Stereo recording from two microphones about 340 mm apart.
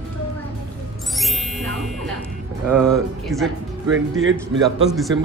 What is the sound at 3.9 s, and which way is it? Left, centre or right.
Speech, right.